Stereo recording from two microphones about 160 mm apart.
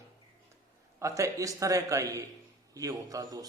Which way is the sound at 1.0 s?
20° right (ahead or behind).